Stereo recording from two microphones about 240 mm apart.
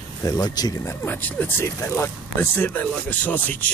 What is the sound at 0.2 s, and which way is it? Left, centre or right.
Speech, centre.